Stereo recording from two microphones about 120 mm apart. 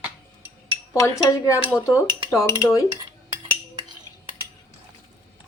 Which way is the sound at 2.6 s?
25° left (ahead or behind).